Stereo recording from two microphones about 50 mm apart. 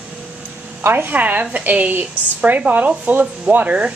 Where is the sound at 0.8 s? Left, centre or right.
Right.